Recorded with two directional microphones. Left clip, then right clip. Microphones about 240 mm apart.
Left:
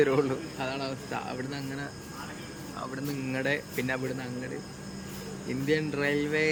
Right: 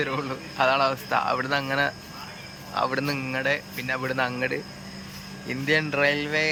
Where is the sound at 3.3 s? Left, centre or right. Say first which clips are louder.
Right 4 dB; centre.